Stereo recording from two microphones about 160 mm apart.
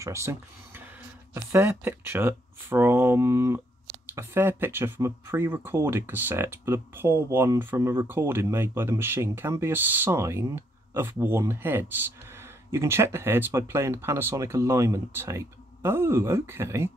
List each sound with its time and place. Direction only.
0.0 s speech: 20° right (ahead or behind)